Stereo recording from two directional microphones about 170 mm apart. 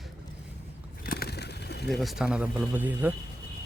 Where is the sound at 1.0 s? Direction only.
65° left (ahead or behind).